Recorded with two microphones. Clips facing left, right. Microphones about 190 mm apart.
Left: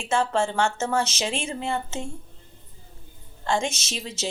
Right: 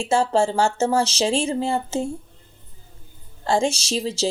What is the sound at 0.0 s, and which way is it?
A woman's voice, 30° right (ahead or behind).